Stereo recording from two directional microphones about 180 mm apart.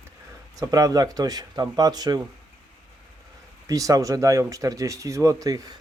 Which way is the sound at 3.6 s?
20° right (ahead or behind).